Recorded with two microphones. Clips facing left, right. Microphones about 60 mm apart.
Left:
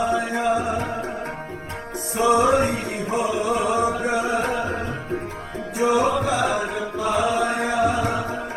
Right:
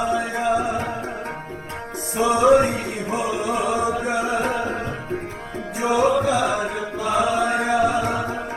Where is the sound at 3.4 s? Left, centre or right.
Right.